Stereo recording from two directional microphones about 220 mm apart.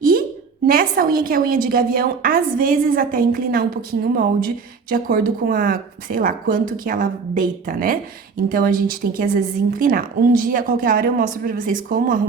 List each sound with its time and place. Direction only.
0.7 s a woman's voice: 40° right (ahead or behind)